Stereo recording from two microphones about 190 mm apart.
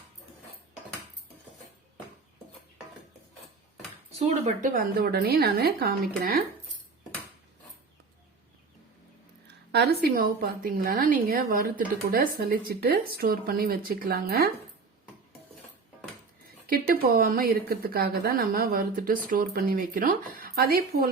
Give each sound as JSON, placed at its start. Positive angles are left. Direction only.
{"t": 4.3, "sound": "a woman's voice", "side_deg": -40}
{"t": 9.7, "sound": "a woman's voice", "side_deg": -55}
{"t": 16.6, "sound": "a woman's voice", "side_deg": -50}